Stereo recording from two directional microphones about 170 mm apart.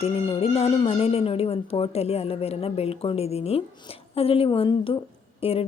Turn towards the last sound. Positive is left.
turn(degrees=35)  # may be behind; listen again after turning